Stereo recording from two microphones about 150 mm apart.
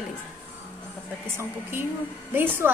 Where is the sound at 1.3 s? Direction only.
15° right (ahead or behind).